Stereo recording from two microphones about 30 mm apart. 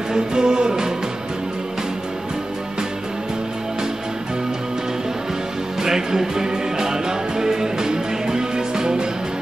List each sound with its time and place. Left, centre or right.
0.1 s music: right
5.8 s music: centre